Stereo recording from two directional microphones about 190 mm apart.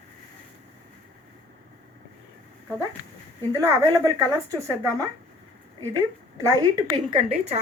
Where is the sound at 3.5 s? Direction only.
15° right (ahead or behind).